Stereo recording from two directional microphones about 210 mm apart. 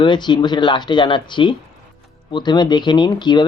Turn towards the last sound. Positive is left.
turn(degrees=20)  # may be behind; listen again after turning